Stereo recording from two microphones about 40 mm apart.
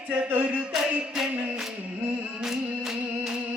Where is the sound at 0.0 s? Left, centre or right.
Right.